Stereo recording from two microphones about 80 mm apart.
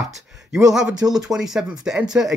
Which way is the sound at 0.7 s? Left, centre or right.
Centre.